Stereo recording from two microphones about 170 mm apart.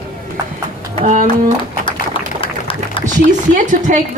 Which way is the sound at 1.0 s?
50° right (ahead or behind).